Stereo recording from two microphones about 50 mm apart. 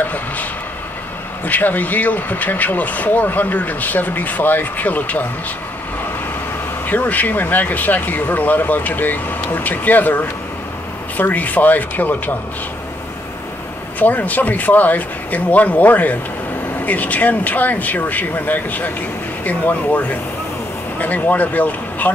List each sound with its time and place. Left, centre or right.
0.0 s vehicle: left
1.4 s speech: left
6.9 s speech: left
13.9 s speech: left